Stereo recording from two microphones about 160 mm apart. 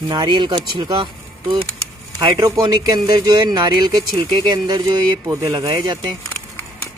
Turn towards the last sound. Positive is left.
turn(degrees=-25)  # may be behind; listen again after turning